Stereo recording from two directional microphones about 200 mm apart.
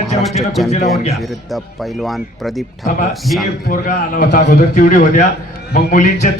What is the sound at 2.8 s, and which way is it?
Speech, 40° left (ahead or behind).